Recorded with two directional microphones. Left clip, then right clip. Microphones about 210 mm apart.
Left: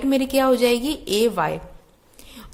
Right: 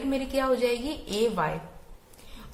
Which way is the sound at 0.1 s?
50° left (ahead or behind).